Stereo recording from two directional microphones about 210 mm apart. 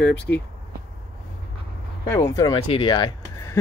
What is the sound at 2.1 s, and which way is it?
Speech, 15° left (ahead or behind).